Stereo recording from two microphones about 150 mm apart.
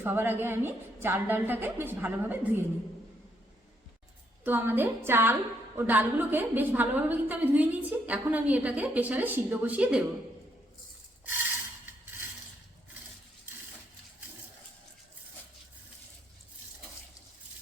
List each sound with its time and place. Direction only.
0.0 s a woman's voice: 15° right (ahead or behind)
4.4 s a woman's voice: 15° right (ahead or behind)